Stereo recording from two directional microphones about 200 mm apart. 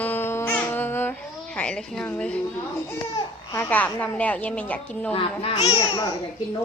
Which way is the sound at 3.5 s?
10° left (ahead or behind).